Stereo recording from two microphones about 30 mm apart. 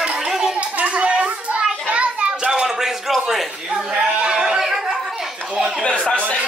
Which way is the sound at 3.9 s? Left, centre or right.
Right.